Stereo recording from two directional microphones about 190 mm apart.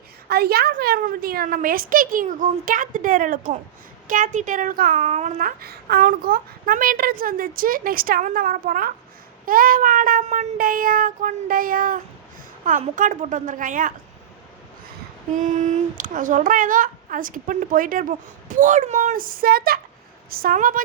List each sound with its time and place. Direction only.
0.3 s speech: 55° right (ahead or behind)
4.9 s speech: 35° right (ahead or behind)
15.4 s speech: 40° right (ahead or behind)